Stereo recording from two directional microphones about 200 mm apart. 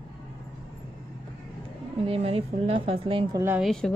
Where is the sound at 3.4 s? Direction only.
10° right (ahead or behind).